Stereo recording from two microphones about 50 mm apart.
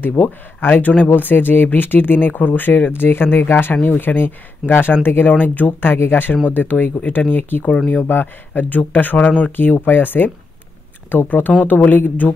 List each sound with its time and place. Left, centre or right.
0.0 s speech: left
5.3 s speech: left
5.8 s speech: left